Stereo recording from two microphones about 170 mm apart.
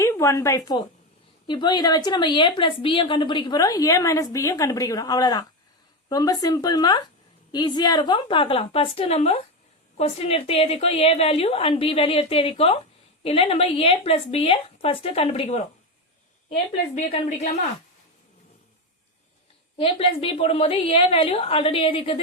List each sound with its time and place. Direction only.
0.0 s a woman's voice: 15° left (ahead or behind); by 15.6 s 40° left (ahead or behind)
16.9 s a woman's voice: 40° left (ahead or behind)
19.7 s a woman's voice: 30° left (ahead or behind)